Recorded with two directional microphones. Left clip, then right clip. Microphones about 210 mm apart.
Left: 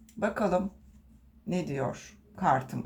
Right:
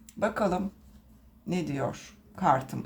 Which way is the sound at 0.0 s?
20° right (ahead or behind).